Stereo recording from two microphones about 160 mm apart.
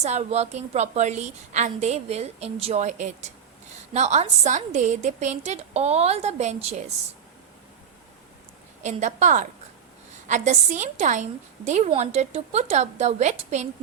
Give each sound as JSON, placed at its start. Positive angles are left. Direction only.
{"t": 0.0, "sound": "a woman's voice", "side_deg": -45}
{"t": 8.8, "sound": "a woman's voice", "side_deg": -50}